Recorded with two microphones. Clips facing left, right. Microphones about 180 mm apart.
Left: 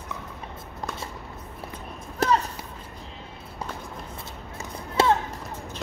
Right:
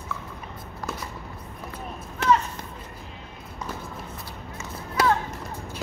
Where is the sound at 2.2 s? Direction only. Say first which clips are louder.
Right 1 dB; 35° left (ahead or behind).